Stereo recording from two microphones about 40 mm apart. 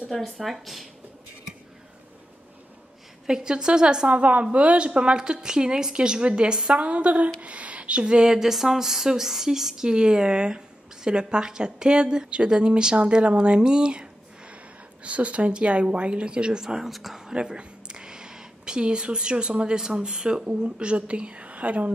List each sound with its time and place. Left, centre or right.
0.1 s speech: centre
3.3 s a woman's voice: centre
4.1 s a woman's voice: right
6.7 s a woman's voice: right
15.0 s a woman's voice: right; by 17.2 s centre
17.3 s speech: right
20.6 s a woman's voice: right